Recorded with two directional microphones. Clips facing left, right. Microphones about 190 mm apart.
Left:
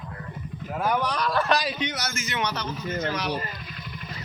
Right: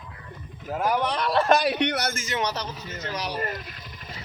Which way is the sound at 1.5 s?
60° right (ahead or behind).